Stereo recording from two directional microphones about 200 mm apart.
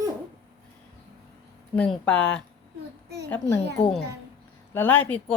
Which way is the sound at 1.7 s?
5° left (ahead or behind).